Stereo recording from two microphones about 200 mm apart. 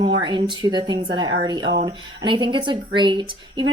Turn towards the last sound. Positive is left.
turn(degrees=-25)  # may be behind; listen again after turning